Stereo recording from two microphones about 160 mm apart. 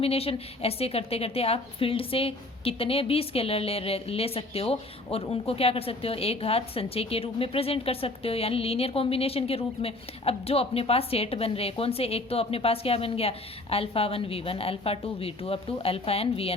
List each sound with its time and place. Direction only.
0.0 s a woman's voice: 40° left (ahead or behind)